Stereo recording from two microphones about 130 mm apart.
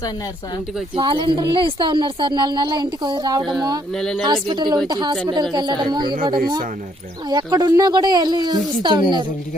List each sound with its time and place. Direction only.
0.9 s a woman's voice: 40° right (ahead or behind)
3.9 s speech: 5° left (ahead or behind)
4.3 s a woman's voice: 35° right (ahead or behind)